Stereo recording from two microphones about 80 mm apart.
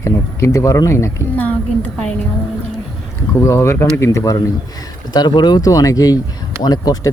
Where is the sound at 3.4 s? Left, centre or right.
Left.